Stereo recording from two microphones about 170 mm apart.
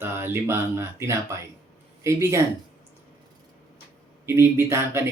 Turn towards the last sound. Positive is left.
turn(degrees=-15)  # may be behind; listen again after turning